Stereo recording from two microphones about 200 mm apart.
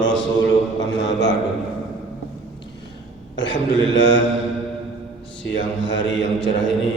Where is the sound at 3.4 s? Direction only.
70° left (ahead or behind).